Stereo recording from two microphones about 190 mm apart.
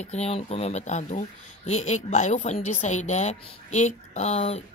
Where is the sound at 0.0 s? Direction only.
35° left (ahead or behind).